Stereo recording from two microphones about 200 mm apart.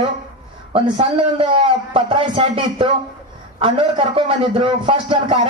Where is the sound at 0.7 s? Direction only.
30° right (ahead or behind).